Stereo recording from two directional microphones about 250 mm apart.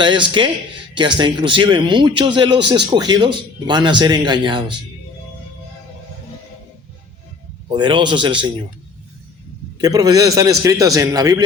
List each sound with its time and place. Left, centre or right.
0.0 s speech: centre
7.7 s speech: centre
9.7 s speech: centre